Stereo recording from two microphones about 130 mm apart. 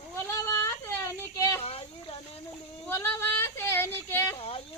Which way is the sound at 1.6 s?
50° left (ahead or behind).